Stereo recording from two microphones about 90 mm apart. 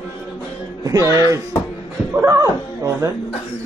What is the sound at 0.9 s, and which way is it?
Speech, 35° right (ahead or behind).